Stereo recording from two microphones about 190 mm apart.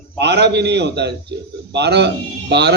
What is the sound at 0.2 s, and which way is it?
Speech, 60° right (ahead or behind).